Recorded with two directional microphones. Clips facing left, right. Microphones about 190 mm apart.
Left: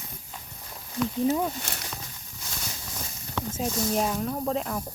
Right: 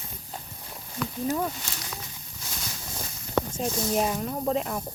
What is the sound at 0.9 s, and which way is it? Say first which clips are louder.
Speech: left 4 dB; 10° left (ahead or behind).